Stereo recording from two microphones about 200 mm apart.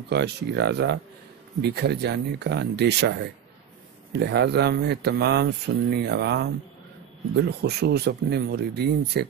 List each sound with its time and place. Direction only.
0.1 s speech: 55° right (ahead or behind)